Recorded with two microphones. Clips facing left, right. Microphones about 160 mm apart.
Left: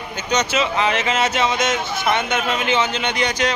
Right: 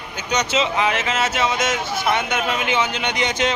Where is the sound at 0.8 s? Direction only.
5° right (ahead or behind).